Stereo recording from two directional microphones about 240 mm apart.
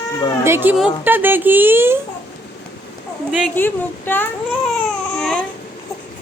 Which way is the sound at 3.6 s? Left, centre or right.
Centre.